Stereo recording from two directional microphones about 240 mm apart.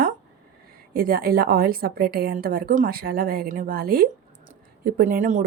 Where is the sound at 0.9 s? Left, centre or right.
Right.